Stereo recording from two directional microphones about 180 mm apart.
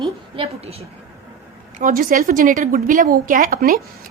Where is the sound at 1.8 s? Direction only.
50° right (ahead or behind).